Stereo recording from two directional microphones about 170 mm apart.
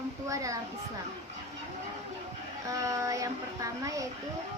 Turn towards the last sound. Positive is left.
turn(degrees=-20)  # may be behind; listen again after turning